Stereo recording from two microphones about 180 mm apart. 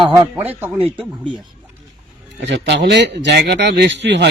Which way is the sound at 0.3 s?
10° right (ahead or behind).